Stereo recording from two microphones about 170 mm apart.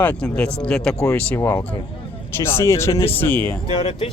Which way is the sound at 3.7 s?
35° left (ahead or behind).